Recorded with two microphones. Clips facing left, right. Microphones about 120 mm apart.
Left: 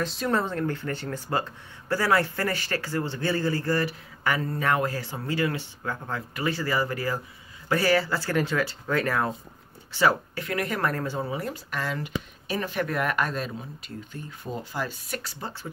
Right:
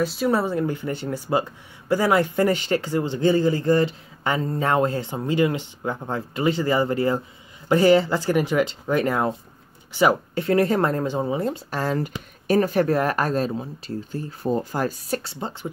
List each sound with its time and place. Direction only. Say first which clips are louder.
0.0 s speech: right 5 dB; 5° right (ahead or behind)
10.4 s speech: right 9 dB; 30° right (ahead or behind)
11.8 s speech: right 6 dB; 40° right (ahead or behind)